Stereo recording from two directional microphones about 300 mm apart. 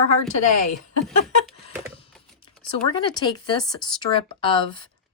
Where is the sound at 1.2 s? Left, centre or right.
Centre.